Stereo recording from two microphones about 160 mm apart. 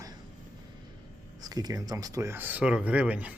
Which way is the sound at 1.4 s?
25° right (ahead or behind).